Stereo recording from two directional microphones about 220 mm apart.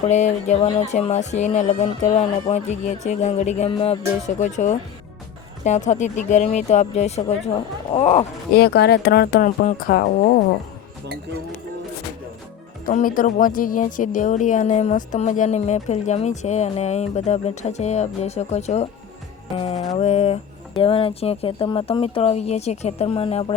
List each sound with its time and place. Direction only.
0.1 s speech: 30° left (ahead or behind)
8.5 s speech: 50° left (ahead or behind)
12.8 s speech: 40° left (ahead or behind)